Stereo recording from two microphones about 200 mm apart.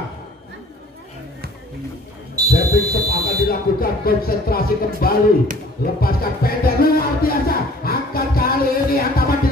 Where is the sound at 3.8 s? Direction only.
45° left (ahead or behind).